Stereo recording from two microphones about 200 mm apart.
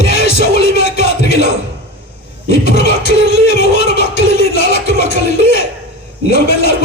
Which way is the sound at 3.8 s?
55° left (ahead or behind).